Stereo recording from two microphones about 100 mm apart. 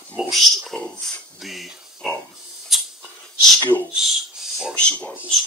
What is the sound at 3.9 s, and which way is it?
Speech, 5° right (ahead or behind).